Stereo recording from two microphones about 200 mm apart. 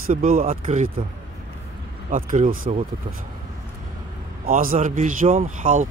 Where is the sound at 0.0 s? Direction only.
45° right (ahead or behind).